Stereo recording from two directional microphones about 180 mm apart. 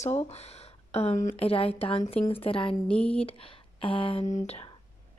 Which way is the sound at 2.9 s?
5° left (ahead or behind).